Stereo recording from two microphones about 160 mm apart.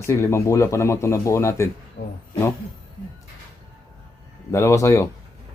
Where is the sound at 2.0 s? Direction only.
55° left (ahead or behind).